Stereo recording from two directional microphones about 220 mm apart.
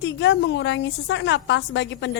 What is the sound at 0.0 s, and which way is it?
A woman's voice, 55° left (ahead or behind).